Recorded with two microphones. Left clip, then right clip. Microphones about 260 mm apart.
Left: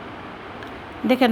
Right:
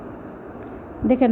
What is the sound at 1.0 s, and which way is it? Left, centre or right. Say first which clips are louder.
Speech: even; left.